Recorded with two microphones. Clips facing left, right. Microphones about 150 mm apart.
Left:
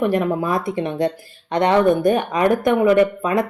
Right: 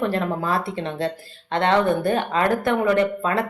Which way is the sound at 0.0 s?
15° left (ahead or behind).